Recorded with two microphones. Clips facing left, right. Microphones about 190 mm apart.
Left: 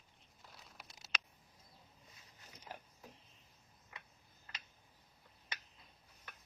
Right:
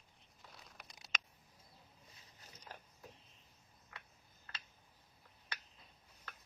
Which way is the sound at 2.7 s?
15° left (ahead or behind).